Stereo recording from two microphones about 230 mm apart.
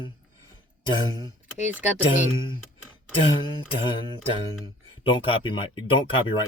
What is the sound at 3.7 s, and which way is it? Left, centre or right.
Speech, left.